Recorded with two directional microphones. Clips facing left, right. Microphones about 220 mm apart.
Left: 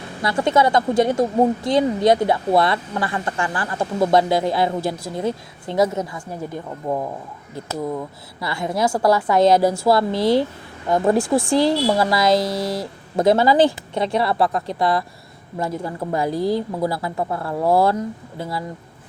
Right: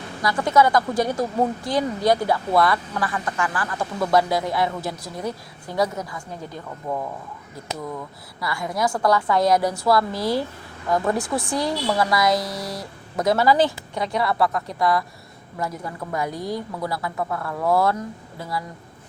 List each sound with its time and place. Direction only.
0.2 s speech: 25° left (ahead or behind)